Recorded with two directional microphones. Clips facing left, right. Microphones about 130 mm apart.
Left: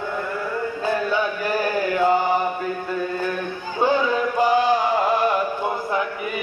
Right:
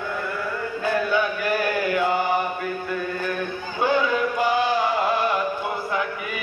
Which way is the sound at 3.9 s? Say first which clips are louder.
Even; 40° left (ahead or behind).